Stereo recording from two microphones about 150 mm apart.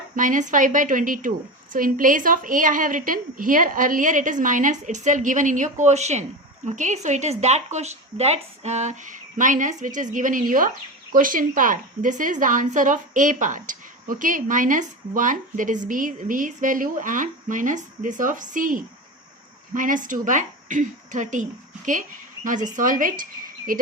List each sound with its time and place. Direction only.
0.2 s a woman's voice: 60° right (ahead or behind)
22.4 s a woman's voice: 60° right (ahead or behind)